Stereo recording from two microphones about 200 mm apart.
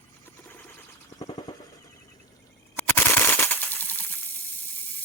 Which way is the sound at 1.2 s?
20° left (ahead or behind).